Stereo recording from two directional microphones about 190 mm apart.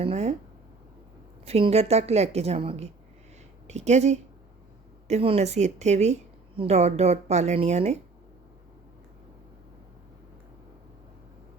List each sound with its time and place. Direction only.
0.0 s a woman's voice: 35° right (ahead or behind)
1.5 s a woman's voice: 30° right (ahead or behind)